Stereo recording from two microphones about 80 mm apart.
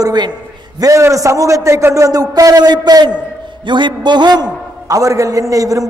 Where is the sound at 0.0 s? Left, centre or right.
Right.